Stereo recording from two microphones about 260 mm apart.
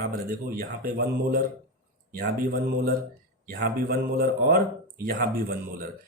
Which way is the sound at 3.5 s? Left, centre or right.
Right.